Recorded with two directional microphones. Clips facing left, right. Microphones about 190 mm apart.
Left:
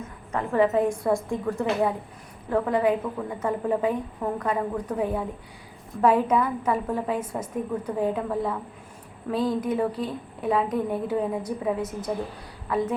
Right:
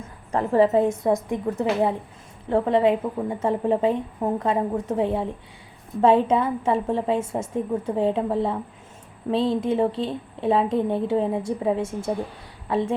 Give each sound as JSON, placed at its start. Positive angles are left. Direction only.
{"t": 0.3, "sound": "a woman's voice", "side_deg": -30}